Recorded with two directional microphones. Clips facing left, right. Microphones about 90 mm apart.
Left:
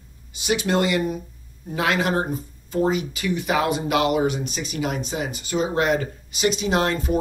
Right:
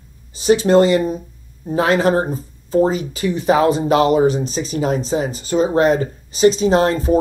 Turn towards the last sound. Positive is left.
turn(degrees=-35)  # may be behind; listen again after turning